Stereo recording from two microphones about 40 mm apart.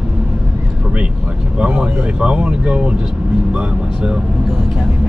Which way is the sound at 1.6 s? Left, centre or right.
Right.